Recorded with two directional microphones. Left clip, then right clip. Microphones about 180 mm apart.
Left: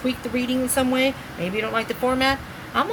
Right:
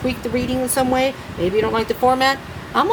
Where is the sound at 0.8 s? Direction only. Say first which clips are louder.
Right 3 dB; 45° right (ahead or behind).